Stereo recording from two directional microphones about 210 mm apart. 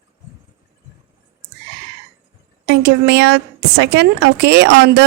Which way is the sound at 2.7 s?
50° right (ahead or behind).